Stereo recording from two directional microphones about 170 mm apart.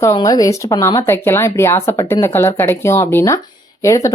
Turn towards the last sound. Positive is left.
turn(degrees=20)  # may be behind; listen again after turning